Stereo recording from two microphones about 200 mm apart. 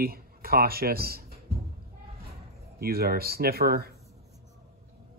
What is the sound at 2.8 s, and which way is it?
Speech, 50° right (ahead or behind).